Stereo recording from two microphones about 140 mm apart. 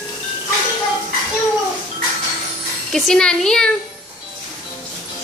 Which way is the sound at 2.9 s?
5° left (ahead or behind).